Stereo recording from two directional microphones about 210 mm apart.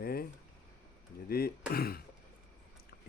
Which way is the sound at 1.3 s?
45° left (ahead or behind).